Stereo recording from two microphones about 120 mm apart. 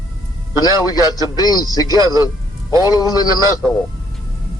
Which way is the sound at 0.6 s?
30° left (ahead or behind).